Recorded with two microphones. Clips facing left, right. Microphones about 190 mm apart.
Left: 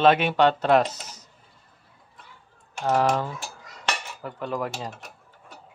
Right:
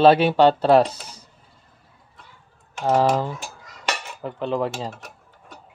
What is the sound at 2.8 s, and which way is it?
Speech, 30° right (ahead or behind).